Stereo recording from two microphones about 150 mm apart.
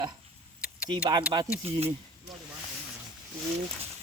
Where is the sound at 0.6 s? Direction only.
5° right (ahead or behind).